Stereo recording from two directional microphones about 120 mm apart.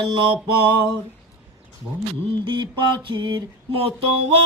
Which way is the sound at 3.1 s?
40° right (ahead or behind).